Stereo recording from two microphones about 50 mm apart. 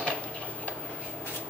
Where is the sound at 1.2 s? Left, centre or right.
Left.